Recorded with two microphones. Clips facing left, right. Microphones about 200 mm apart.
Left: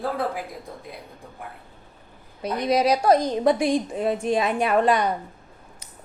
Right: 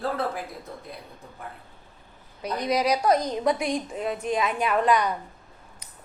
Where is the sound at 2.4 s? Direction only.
25° left (ahead or behind).